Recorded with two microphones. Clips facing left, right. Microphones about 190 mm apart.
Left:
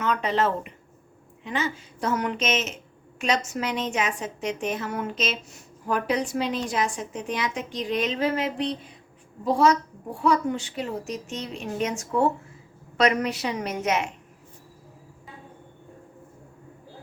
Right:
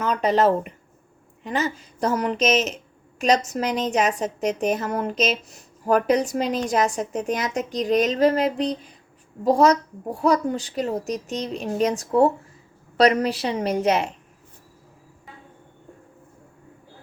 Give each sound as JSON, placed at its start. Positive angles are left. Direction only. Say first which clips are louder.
{"t": 0.0, "sound": "a woman's voice", "louder": "right 5 dB", "side_deg": -40}